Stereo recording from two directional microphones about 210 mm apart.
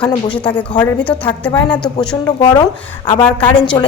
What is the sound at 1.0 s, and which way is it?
Speech, 10° left (ahead or behind).